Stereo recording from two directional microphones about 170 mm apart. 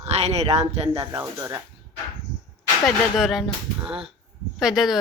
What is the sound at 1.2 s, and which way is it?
Speech, 20° right (ahead or behind).